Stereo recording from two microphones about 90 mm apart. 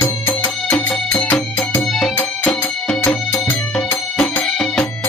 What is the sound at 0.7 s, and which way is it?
Music, 10° left (ahead or behind).